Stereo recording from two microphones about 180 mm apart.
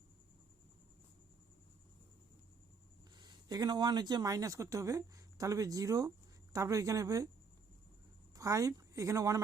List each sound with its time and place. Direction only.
3.2 s speech: 20° right (ahead or behind)
8.4 s speech: 20° right (ahead or behind)